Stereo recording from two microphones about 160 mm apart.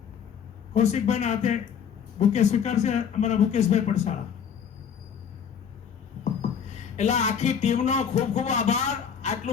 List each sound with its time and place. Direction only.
0.7 s speech: 45° left (ahead or behind)
6.7 s speech: 45° left (ahead or behind)